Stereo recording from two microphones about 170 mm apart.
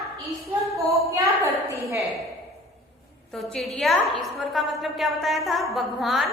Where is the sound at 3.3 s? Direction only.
Centre (ahead or behind).